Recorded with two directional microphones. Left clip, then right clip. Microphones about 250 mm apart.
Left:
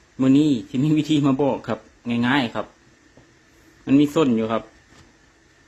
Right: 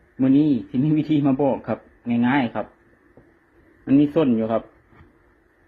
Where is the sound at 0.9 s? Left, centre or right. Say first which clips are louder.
Left 1 dB; left.